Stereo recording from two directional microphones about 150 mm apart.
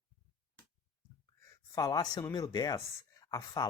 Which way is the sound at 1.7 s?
25° left (ahead or behind).